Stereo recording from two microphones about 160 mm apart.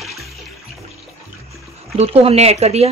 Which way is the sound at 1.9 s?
40° right (ahead or behind).